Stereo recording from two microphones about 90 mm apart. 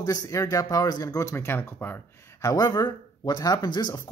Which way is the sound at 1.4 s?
25° left (ahead or behind).